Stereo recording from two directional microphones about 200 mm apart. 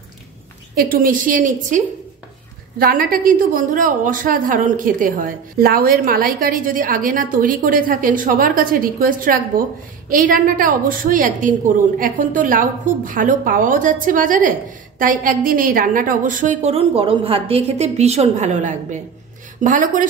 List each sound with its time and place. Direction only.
0.7 s a woman's voice: 45° right (ahead or behind)
2.8 s a woman's voice: 45° right (ahead or behind)